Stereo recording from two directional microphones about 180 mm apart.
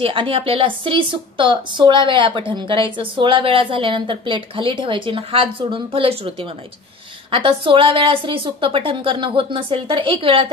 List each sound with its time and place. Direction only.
0.0 s a woman's voice: 30° right (ahead or behind)